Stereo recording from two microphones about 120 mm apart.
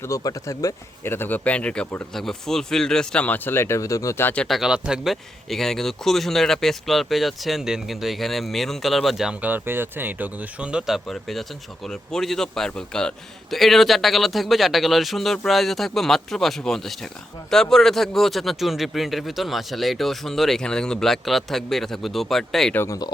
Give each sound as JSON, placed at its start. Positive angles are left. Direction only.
{"t": 0.0, "sound": "speech", "side_deg": 30}
{"t": 4.4, "sound": "speech", "side_deg": 0}
{"t": 22.7, "sound": "speech", "side_deg": 20}